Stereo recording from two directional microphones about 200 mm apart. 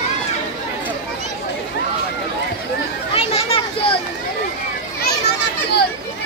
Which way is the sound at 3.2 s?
30° left (ahead or behind).